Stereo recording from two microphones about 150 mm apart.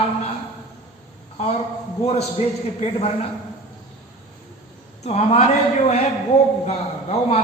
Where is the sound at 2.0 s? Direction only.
45° left (ahead or behind).